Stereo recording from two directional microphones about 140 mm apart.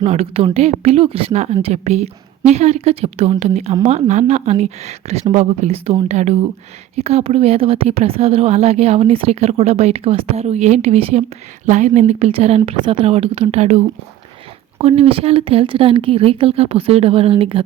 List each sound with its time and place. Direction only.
0.0 s speech: 50° right (ahead or behind)
11.6 s speech: 60° right (ahead or behind); by 17.6 s 40° right (ahead or behind)